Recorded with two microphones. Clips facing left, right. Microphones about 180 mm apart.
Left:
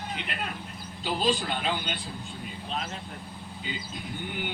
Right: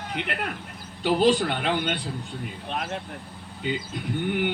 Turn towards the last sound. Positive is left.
turn(degrees=-65)  # may be behind; listen again after turning